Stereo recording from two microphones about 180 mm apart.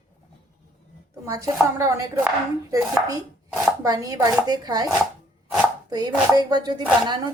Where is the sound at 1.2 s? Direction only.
20° right (ahead or behind).